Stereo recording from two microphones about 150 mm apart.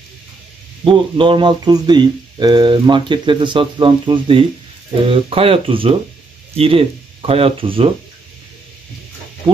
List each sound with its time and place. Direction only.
0.8 s speech: 35° right (ahead or behind)